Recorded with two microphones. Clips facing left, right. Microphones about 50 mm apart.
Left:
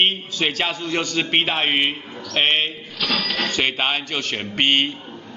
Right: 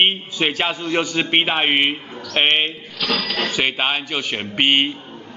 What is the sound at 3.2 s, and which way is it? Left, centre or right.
A man's voice, centre.